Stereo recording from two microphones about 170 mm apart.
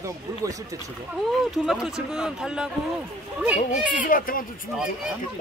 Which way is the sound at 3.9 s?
55° left (ahead or behind).